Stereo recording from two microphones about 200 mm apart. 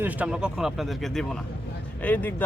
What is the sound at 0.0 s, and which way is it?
Speech, 5° right (ahead or behind).